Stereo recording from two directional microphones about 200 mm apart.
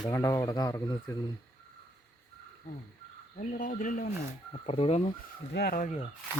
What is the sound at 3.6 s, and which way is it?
Speech, 40° left (ahead or behind).